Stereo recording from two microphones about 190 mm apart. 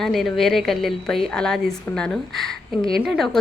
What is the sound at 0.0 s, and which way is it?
Speech, centre (ahead or behind).